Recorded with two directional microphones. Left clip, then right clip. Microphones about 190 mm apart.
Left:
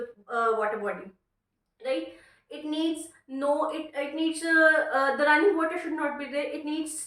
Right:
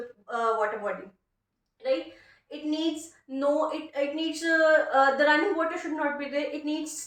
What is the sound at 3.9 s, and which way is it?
Speech, 15° left (ahead or behind).